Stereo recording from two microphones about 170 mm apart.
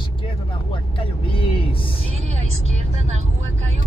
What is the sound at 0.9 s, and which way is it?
Vehicle, 30° left (ahead or behind).